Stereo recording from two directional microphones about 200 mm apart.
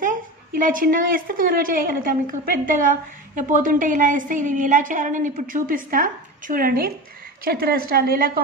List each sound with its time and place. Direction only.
0.0 s a woman's voice: 40° right (ahead or behind)